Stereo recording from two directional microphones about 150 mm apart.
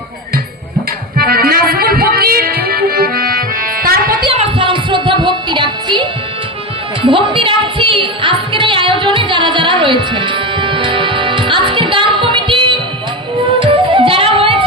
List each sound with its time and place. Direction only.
1.1 s music: 80° right
4.3 s music: 35° right (ahead or behind)